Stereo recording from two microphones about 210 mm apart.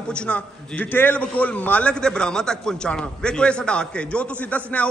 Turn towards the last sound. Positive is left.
turn(degrees=5)  # may be behind; listen again after turning